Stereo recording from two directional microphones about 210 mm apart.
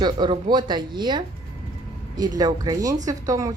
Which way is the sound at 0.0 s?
20° right (ahead or behind).